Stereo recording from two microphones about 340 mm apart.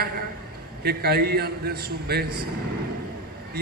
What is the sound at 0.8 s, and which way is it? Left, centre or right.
A man's voice, right.